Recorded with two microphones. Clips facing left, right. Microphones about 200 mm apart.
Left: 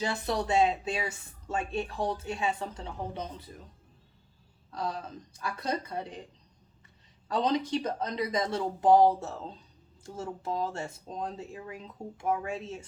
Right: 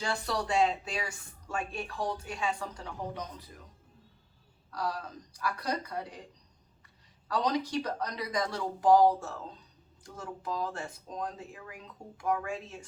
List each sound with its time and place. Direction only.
0.0 s speech: 20° left (ahead or behind)
4.7 s speech: 25° left (ahead or behind)
7.3 s speech: 25° left (ahead or behind)